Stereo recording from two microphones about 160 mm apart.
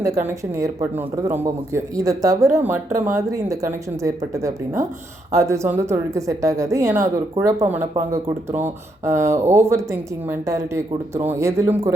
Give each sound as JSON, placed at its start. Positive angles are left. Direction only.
{"t": 0.0, "sound": "speech", "side_deg": -15}